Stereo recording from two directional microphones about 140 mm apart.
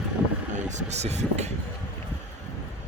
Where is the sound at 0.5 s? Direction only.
55° right (ahead or behind).